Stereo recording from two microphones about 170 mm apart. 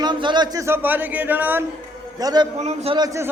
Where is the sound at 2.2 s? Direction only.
25° right (ahead or behind).